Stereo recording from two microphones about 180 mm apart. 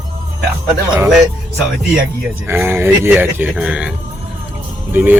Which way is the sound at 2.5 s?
10° right (ahead or behind).